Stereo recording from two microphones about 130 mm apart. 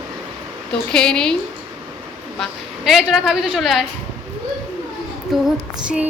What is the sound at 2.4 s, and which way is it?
A woman's voice, centre (ahead or behind).